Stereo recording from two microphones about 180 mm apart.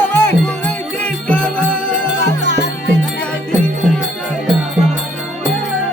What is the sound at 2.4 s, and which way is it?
Music, 70° left (ahead or behind).